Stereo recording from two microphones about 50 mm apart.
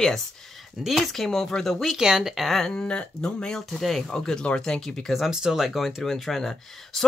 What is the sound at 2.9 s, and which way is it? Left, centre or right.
Speech, left.